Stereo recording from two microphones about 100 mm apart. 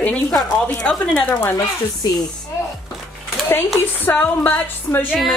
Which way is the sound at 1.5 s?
40° left (ahead or behind).